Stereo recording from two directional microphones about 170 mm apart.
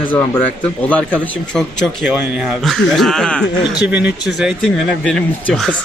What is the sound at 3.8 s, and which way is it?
Speech, 10° right (ahead or behind).